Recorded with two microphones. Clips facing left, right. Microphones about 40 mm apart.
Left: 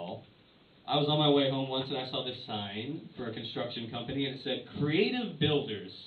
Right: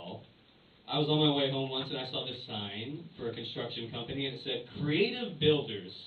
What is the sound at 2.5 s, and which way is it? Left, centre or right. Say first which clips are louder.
Speech: left 2 dB; centre.